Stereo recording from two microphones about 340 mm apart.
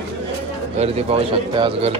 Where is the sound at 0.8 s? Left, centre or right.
Centre.